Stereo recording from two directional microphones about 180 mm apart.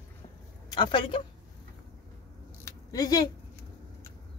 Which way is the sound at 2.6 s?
20° left (ahead or behind).